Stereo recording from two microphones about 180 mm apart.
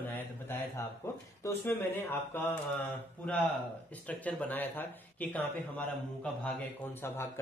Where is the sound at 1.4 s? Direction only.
10° left (ahead or behind).